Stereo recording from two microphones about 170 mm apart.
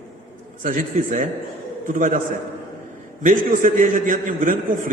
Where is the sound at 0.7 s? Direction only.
55° right (ahead or behind).